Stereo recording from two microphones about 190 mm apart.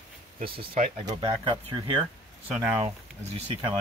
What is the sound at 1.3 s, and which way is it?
Speech, 25° right (ahead or behind).